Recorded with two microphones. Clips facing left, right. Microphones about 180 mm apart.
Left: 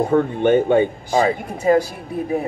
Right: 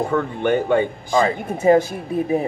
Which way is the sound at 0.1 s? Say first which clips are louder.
Left 4 dB; 20° left (ahead or behind).